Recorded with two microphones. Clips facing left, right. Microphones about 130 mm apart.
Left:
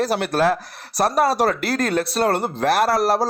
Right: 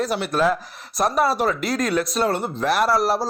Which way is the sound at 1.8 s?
35° left (ahead or behind).